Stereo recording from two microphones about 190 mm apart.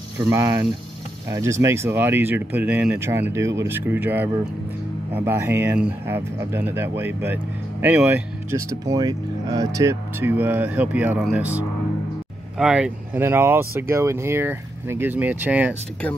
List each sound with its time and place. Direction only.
0.2 s speech: 15° right (ahead or behind)